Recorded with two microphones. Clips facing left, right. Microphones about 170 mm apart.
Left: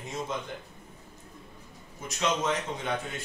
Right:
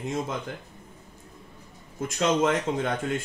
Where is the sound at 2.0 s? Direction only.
50° right (ahead or behind).